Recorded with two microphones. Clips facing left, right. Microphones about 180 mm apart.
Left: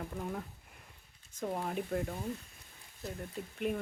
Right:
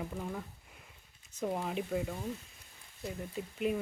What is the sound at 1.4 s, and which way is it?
Speech, centre (ahead or behind).